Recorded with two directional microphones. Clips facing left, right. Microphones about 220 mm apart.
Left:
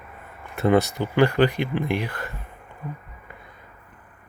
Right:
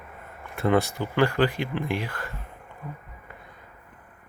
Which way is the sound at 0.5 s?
20° left (ahead or behind).